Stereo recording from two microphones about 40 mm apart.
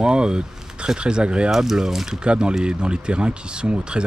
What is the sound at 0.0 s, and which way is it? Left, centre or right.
Speech, right.